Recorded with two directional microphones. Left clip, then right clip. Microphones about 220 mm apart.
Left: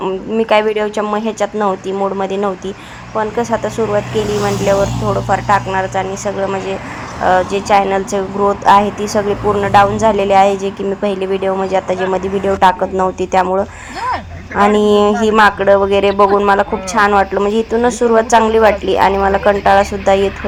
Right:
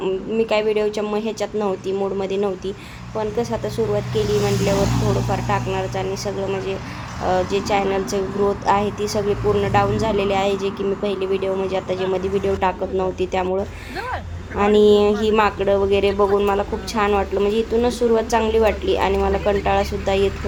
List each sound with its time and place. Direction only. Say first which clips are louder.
0.0 s speech: left 4 dB; 20° left (ahead or behind)
5.3 s speech: left 9 dB; 15° left (ahead or behind)
7.3 s speech: left 8 dB; 20° left (ahead or behind)